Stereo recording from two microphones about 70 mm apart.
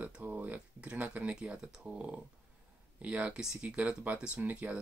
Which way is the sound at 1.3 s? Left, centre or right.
Centre.